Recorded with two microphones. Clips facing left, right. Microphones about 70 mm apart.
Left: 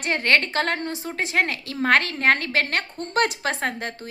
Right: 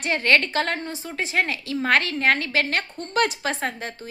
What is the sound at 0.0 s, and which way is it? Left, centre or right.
A woman's voice, left.